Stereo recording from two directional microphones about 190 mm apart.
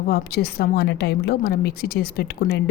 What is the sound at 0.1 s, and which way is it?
A woman's voice, 55° left (ahead or behind).